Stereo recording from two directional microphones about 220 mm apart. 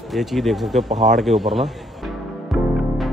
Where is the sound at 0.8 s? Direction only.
30° right (ahead or behind).